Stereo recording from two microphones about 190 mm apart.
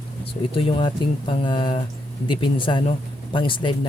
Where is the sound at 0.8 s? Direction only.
25° left (ahead or behind).